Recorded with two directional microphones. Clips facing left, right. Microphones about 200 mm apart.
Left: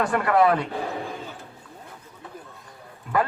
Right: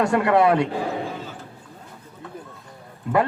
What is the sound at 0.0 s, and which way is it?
Speech, 25° right (ahead or behind).